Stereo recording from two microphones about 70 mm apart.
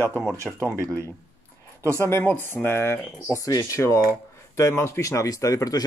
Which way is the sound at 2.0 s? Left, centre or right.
Left.